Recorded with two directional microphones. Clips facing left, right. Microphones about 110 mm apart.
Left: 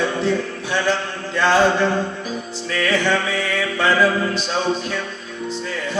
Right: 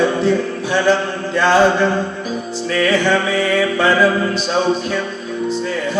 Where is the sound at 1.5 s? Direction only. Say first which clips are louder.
Right 3 dB; 50° right (ahead or behind).